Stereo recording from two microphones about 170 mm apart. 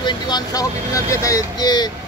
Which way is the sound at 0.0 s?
25° left (ahead or behind).